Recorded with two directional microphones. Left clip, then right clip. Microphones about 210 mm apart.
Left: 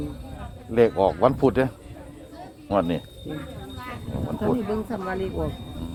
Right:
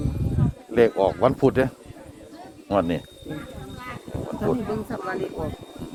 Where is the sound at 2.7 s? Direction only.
15° right (ahead or behind).